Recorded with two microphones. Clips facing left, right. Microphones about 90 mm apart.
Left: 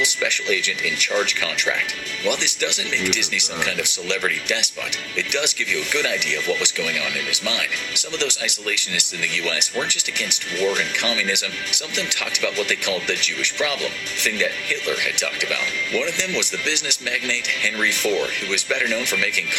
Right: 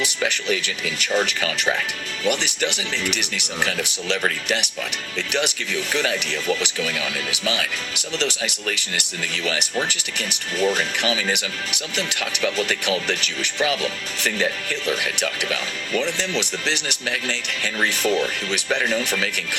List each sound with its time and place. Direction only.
0.0 s speech: 40° right (ahead or behind)